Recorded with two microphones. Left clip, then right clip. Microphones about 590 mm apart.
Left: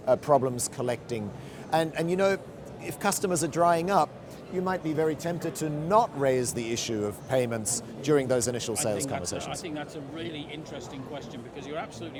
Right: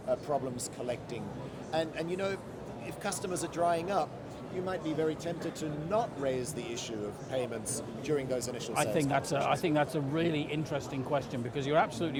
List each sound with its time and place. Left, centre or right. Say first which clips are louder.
0.1 s speech: left 9 dB; left
9.6 s speech: right 7 dB; right